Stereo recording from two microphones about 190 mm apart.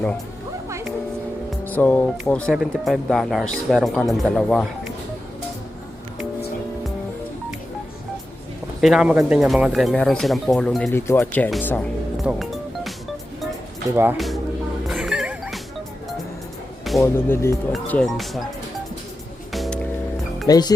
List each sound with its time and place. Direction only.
1.5 s speech: 10° left (ahead or behind)
8.8 s speech: 5° right (ahead or behind)
12.2 s music: centre (ahead or behind)
13.9 s speech: 10° right (ahead or behind)
14.8 s music: centre (ahead or behind)
17.0 s speech: 10° left (ahead or behind)
19.5 s music: centre (ahead or behind)
20.5 s speech: 20° left (ahead or behind)